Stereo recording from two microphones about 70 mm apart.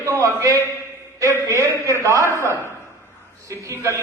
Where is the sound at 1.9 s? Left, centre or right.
Right.